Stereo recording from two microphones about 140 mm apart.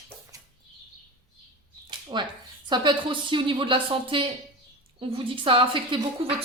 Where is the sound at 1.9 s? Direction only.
35° right (ahead or behind).